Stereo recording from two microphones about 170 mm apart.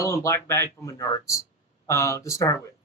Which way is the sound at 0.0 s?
15° left (ahead or behind).